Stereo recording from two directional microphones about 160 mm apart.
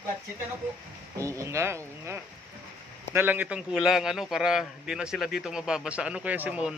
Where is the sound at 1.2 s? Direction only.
20° right (ahead or behind).